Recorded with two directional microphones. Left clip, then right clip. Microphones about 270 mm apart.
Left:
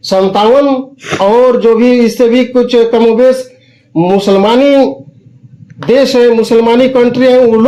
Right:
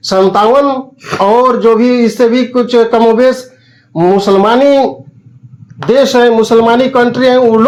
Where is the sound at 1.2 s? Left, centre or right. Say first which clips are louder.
Left 1 dB; right.